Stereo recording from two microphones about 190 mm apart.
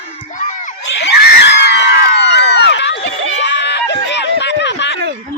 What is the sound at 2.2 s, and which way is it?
Run, 65° left (ahead or behind).